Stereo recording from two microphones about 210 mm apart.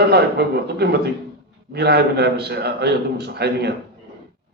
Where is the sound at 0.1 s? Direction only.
50° right (ahead or behind).